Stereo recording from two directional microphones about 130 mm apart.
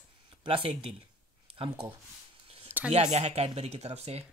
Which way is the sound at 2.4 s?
45° right (ahead or behind).